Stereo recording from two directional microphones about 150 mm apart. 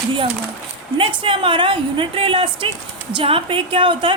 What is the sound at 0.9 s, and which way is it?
A woman's voice, 35° right (ahead or behind).